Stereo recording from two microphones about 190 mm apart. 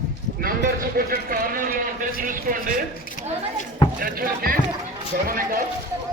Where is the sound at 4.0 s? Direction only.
50° right (ahead or behind).